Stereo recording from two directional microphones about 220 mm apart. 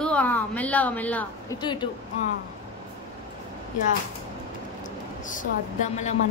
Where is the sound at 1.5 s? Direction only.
20° left (ahead or behind).